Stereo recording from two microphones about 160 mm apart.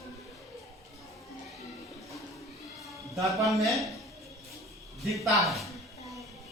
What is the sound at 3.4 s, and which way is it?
Speech, centre (ahead or behind).